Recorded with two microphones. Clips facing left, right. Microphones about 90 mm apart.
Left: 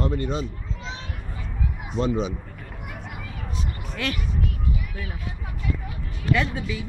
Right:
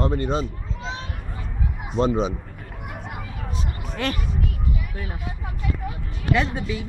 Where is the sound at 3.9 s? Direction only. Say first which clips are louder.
Right 3 dB; 35° right (ahead or behind).